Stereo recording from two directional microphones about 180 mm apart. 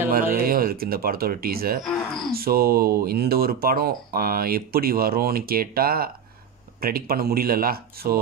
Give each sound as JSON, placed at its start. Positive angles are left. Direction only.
{"t": 0.1, "sound": "speech", "side_deg": -55}